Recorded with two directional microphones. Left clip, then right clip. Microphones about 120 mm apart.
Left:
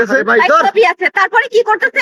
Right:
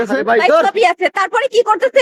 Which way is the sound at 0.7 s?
30° right (ahead or behind).